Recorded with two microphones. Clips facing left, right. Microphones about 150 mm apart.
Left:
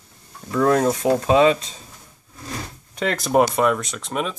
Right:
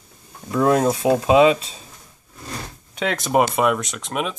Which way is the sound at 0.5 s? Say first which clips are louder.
Even; 10° right (ahead or behind).